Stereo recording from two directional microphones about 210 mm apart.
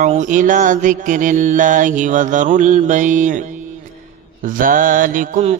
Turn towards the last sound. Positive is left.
turn(degrees=-35)  # may be behind; listen again after turning